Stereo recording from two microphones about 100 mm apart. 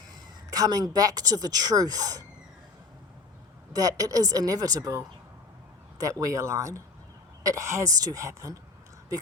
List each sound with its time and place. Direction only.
0.1 s a woman's voice: 40° right (ahead or behind)
3.7 s a woman's voice: 35° right (ahead or behind)